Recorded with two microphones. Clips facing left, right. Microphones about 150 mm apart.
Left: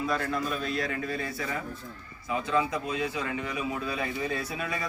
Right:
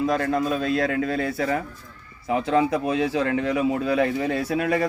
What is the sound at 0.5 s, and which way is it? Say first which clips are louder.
A man's voice: right 8 dB; 90° right.